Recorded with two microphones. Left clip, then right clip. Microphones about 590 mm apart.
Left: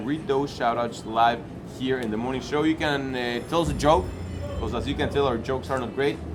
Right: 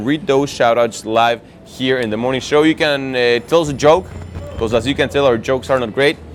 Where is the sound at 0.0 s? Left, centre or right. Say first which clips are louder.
Right 10 dB; right.